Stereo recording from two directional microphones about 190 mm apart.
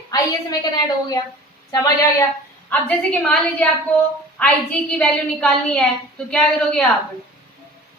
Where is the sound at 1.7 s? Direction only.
20° left (ahead or behind).